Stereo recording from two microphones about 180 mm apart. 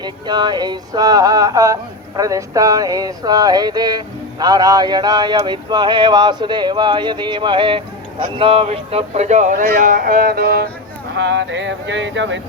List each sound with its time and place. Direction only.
0.0 s speech: 25° right (ahead or behind); by 10.7 s 60° right (ahead or behind)
11.2 s speech: 80° right